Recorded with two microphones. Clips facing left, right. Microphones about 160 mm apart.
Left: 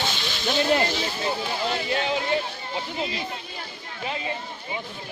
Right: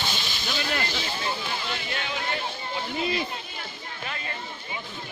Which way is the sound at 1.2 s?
30° left (ahead or behind).